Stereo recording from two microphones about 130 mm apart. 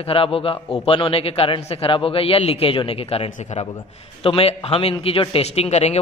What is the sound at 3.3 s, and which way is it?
Speech, 65° left (ahead or behind).